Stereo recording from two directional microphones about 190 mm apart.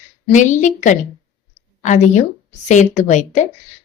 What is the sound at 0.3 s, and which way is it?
A woman's voice, 40° left (ahead or behind).